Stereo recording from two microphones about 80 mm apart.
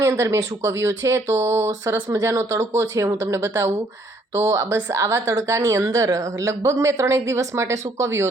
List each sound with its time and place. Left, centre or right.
0.0 s a woman's voice: right